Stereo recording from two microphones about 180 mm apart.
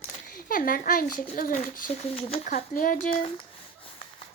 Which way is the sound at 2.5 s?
50° left (ahead or behind).